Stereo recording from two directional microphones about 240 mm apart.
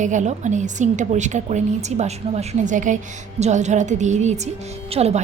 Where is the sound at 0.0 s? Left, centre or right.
Right.